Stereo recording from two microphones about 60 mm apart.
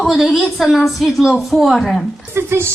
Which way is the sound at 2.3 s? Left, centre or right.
Right.